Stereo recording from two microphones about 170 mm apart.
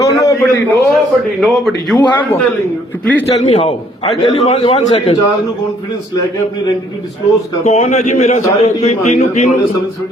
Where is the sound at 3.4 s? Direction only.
35° left (ahead or behind).